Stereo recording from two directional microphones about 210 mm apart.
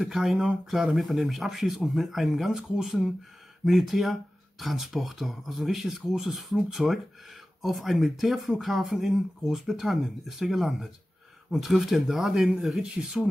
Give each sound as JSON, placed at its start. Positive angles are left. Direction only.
{"t": 0.0, "sound": "speech", "side_deg": 0}